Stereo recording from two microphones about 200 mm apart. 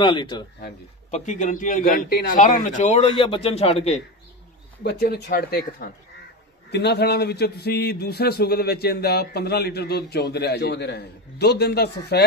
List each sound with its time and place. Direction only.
0.0 s speech: 20° left (ahead or behind)
1.1 s a man's voice: 40° left (ahead or behind)
3.1 s speech: 25° left (ahead or behind)
4.8 s a man's voice: 55° left (ahead or behind)